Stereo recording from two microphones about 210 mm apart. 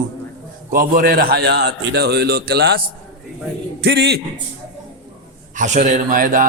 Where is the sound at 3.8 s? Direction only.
50° right (ahead or behind).